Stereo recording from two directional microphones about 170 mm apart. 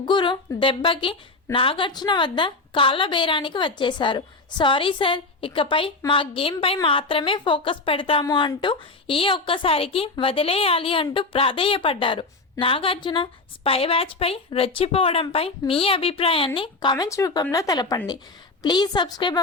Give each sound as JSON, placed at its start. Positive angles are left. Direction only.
{"t": 0.0, "sound": "a woman's voice", "side_deg": 25}